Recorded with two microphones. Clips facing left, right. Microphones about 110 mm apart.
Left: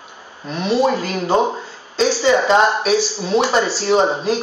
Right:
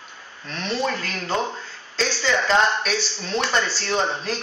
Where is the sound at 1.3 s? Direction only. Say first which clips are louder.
Left 8 dB; 35° left (ahead or behind).